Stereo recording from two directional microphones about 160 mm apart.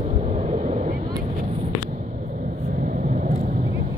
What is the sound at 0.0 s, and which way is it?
Vehicle, 45° right (ahead or behind).